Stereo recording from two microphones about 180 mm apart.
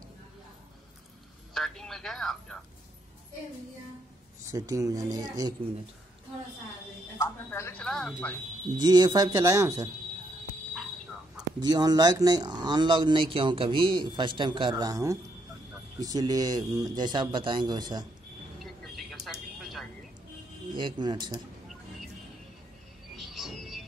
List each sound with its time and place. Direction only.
1.5 s speech: centre (ahead or behind)
4.5 s speech: 20° right (ahead or behind)
7.2 s a woman's voice: 15° left (ahead or behind)
8.7 s speech: 25° right (ahead or behind)
11.6 s speech: 20° right (ahead or behind)
18.6 s vehicle: centre (ahead or behind)
19.6 s a sound: centre (ahead or behind)
20.7 s speech: 25° right (ahead or behind)
23.1 s music: centre (ahead or behind)